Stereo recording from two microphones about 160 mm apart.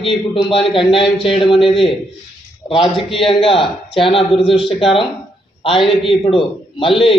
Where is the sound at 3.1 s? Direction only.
35° left (ahead or behind).